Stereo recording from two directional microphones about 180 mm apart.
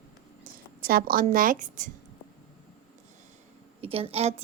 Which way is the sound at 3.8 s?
30° right (ahead or behind).